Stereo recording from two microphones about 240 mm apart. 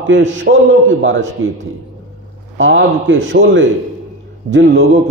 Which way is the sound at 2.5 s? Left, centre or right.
Right.